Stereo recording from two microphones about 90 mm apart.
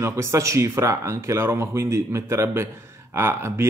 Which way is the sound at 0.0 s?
35° right (ahead or behind).